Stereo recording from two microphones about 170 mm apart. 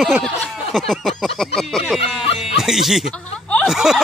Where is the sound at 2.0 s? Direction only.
35° left (ahead or behind).